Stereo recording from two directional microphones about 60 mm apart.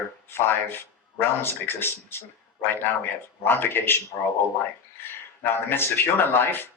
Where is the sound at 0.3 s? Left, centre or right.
Left.